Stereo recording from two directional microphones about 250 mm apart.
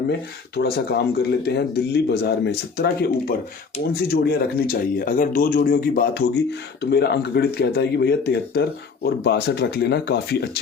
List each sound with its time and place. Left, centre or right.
0.5 s speech: left